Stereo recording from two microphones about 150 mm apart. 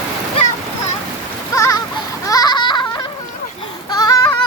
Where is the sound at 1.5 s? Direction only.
20° left (ahead or behind).